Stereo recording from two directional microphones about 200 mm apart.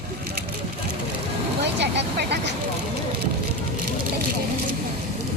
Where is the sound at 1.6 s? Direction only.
60° right (ahead or behind).